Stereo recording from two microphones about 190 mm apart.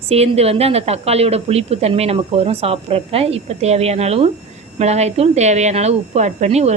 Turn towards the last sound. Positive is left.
turn(degrees=-35)  # may be behind; listen again after turning